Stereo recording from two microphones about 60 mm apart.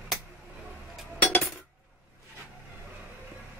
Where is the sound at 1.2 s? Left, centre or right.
Left.